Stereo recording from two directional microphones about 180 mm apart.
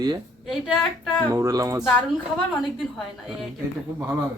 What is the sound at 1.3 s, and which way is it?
Speech, 20° right (ahead or behind).